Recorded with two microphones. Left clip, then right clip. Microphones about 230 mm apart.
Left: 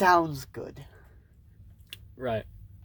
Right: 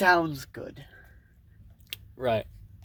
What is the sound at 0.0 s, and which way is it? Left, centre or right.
Speech, left.